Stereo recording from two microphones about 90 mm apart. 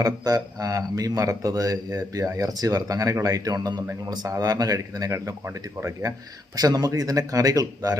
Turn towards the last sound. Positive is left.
turn(degrees=-40)  # may be behind; listen again after turning